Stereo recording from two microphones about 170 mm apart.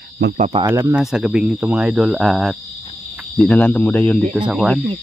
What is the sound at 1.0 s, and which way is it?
Speech, 5° right (ahead or behind).